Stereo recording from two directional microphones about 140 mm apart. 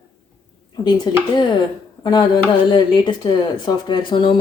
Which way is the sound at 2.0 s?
35° left (ahead or behind).